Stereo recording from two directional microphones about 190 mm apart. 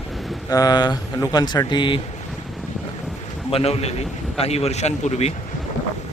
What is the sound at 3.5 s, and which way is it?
Speech, 30° left (ahead or behind).